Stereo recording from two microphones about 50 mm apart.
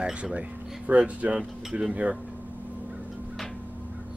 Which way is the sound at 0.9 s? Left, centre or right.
Right.